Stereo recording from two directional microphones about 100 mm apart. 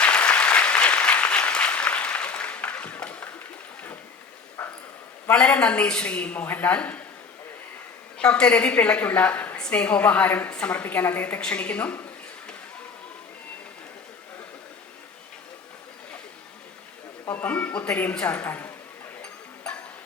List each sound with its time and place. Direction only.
0.0 s applause: 10° left (ahead or behind)
5.3 s a woman's voice: 10° left (ahead or behind)
8.2 s a woman's voice: 10° left (ahead or behind)
17.2 s a woman's voice: 20° left (ahead or behind)
19.2 s music: 10° left (ahead or behind)